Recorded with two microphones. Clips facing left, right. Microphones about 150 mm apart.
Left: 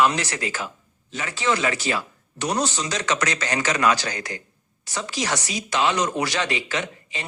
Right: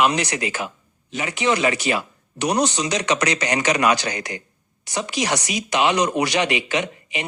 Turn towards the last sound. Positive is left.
turn(degrees=-15)  # may be behind; listen again after turning